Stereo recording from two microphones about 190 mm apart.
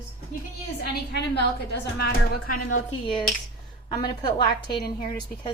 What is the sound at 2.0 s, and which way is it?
Speech, 55° left (ahead or behind).